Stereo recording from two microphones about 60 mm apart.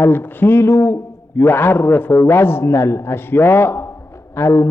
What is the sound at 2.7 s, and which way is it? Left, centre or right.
A man's voice, left.